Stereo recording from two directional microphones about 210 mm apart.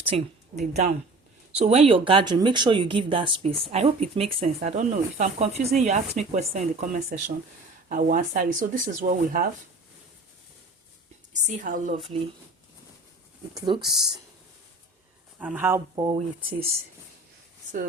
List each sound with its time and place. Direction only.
0.0 s a woman's voice: 30° right (ahead or behind)
11.4 s speech: 40° right (ahead or behind)
13.6 s speech: 20° right (ahead or behind)
15.4 s speech: 5° right (ahead or behind)
16.0 s speech: 30° right (ahead or behind)